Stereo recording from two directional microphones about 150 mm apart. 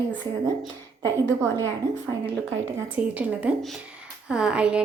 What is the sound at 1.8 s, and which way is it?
Speech, 20° right (ahead or behind).